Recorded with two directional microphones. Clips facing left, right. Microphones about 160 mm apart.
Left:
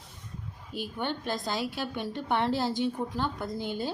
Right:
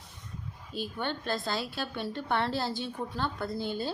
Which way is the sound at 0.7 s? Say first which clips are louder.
Left 1 dB; 15° left (ahead or behind).